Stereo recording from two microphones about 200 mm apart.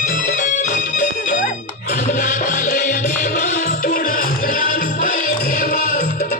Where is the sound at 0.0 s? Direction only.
40° left (ahead or behind).